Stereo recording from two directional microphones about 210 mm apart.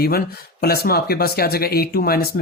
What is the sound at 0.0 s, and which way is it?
Speech, 45° left (ahead or behind).